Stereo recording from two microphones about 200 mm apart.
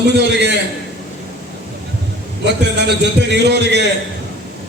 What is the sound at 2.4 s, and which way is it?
A man's voice, 55° right (ahead or behind).